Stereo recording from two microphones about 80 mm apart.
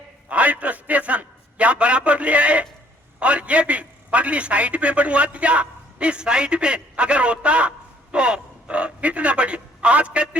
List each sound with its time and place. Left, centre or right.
0.3 s a man's voice: centre